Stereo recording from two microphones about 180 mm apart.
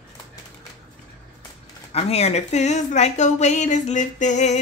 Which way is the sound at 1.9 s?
35° left (ahead or behind).